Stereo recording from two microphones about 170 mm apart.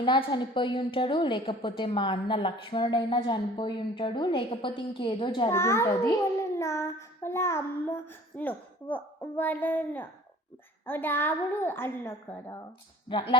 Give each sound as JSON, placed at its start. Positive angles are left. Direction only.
{"t": 0.0, "sound": "a woman's voice", "side_deg": 30}
{"t": 5.5, "sound": "a child's voice", "side_deg": 15}
{"t": 13.1, "sound": "a woman's voice", "side_deg": 30}